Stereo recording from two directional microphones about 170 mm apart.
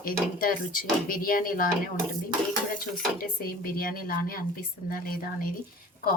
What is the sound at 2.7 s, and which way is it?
Speech, 60° left (ahead or behind).